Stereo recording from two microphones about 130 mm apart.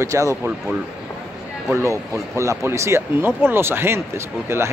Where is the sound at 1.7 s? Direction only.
20° right (ahead or behind).